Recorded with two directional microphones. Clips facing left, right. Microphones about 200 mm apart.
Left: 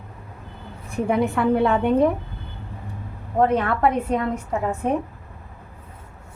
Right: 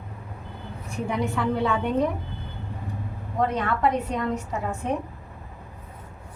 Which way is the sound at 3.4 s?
55° left (ahead or behind).